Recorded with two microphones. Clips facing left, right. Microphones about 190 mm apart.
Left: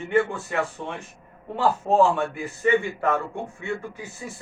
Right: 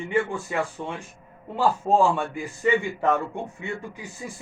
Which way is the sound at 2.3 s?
15° right (ahead or behind).